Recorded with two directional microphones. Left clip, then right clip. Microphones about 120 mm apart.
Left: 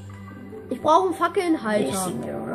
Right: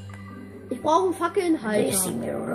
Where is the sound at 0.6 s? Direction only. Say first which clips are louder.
Left 3 dB; 35° left (ahead or behind).